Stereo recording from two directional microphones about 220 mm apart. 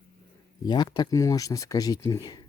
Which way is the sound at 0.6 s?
20° left (ahead or behind).